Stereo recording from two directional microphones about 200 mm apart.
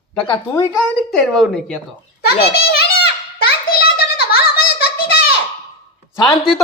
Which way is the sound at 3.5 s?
50° left (ahead or behind).